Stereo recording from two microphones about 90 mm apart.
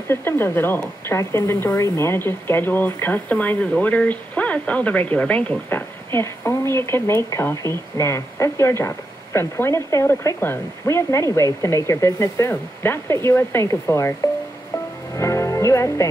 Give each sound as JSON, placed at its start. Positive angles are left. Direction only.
{"t": 0.1, "sound": "a woman's voice", "side_deg": 25}
{"t": 15.1, "sound": "music", "side_deg": 35}